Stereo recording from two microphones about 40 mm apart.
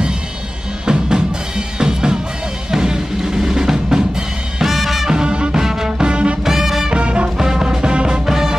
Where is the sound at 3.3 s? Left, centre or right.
Centre.